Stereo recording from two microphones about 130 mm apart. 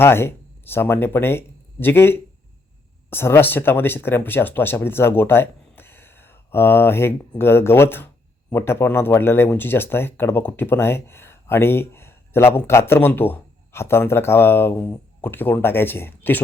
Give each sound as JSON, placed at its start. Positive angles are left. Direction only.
{"t": 0.0, "sound": "speech", "side_deg": 20}